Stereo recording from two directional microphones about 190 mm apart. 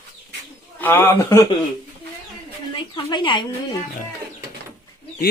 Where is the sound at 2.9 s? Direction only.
25° left (ahead or behind).